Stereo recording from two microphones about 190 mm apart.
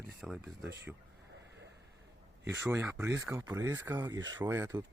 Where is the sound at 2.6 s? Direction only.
10° right (ahead or behind).